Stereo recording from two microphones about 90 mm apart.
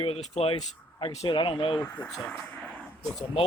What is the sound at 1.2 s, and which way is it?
Speech, 70° left (ahead or behind).